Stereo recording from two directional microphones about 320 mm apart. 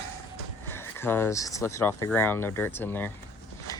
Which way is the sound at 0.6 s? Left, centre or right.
Centre.